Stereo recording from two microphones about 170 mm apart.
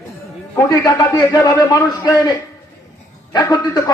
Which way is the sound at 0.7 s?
20° left (ahead or behind).